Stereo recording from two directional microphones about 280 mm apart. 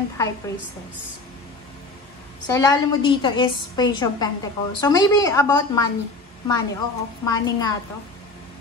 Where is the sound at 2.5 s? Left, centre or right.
Centre.